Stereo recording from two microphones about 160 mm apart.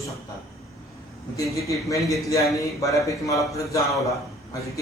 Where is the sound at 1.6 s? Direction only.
20° left (ahead or behind).